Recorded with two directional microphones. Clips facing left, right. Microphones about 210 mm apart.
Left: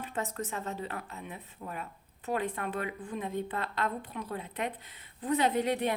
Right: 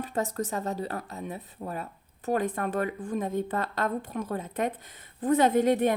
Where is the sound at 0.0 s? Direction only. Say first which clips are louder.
Right 6 dB; 40° right (ahead or behind).